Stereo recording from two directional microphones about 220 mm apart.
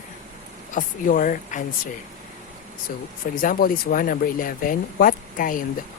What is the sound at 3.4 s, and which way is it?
Speech, 40° left (ahead or behind).